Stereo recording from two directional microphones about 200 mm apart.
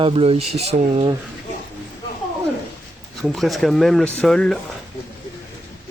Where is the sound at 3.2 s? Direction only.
Centre (ahead or behind).